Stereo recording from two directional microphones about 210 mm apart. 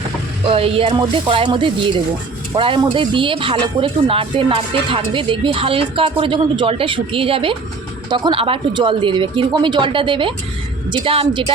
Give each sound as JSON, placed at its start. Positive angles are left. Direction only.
{"t": 0.4, "sound": "speech", "side_deg": -25}